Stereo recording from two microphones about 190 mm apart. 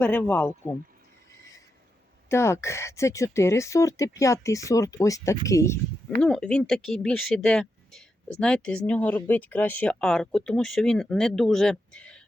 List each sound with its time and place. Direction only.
0.0 s speech: 10° left (ahead or behind)
2.3 s speech: 15° left (ahead or behind)
6.2 s speech: 5° left (ahead or behind)